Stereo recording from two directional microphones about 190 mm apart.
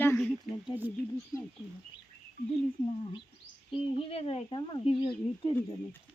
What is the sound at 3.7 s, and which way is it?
Speech, 30° left (ahead or behind).